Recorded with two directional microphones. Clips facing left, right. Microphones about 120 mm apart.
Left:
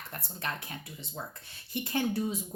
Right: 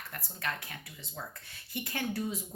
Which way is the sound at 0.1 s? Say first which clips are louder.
Even; 25° left (ahead or behind).